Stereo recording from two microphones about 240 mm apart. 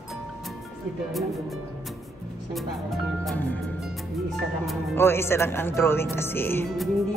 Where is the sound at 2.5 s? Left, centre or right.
Centre.